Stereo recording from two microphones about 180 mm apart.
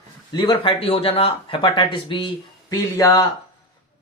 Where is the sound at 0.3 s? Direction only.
30° left (ahead or behind).